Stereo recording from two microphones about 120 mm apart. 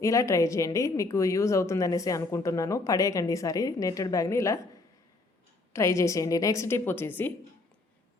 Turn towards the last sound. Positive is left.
turn(degrees=15)  # may be behind; listen again after turning